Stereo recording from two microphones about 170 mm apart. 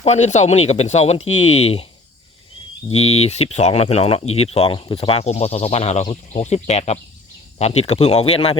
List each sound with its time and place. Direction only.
0.0 s speech: 40° left (ahead or behind)
2.9 s speech: 40° left (ahead or behind)